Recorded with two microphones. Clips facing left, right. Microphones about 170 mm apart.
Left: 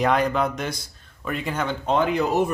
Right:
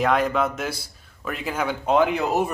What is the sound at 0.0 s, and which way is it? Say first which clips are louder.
Speech: even; centre (ahead or behind).